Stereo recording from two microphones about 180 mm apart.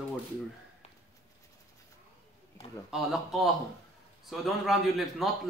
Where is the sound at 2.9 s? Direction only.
Centre (ahead or behind).